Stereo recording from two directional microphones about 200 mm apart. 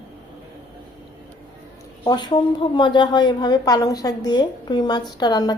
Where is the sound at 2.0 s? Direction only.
20° left (ahead or behind).